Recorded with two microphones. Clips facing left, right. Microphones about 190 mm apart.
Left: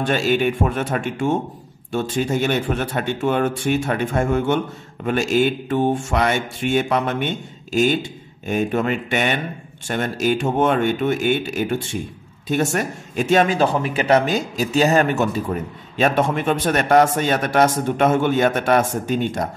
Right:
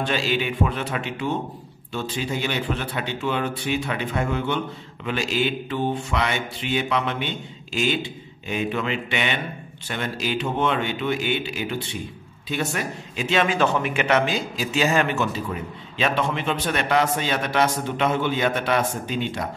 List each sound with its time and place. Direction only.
0.0 s speech: 45° left (ahead or behind)